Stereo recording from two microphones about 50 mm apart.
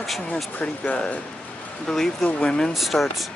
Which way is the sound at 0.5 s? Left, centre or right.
Left.